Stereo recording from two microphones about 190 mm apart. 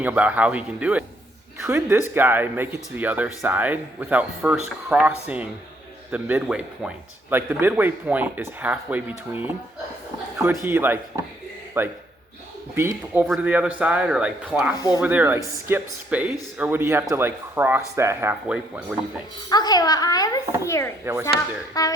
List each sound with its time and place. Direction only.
0.0 s a man's voice: 10° right (ahead or behind)
19.5 s a child's voice: 20° left (ahead or behind)
21.0 s speech: 10° right (ahead or behind)
21.7 s a child's voice: 20° left (ahead or behind)